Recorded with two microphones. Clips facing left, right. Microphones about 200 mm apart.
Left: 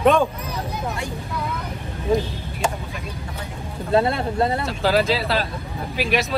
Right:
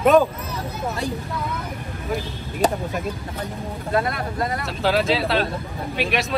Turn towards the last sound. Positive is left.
turn(degrees=0)  # may be behind; listen again after turning